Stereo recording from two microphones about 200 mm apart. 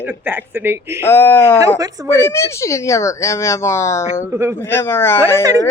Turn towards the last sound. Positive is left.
turn(degrees=10)  # may be behind; listen again after turning